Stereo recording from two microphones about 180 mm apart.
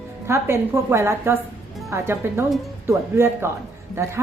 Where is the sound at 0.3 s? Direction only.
15° right (ahead or behind).